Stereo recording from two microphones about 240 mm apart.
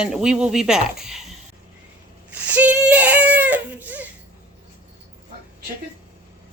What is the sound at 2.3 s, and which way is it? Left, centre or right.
Speech, centre.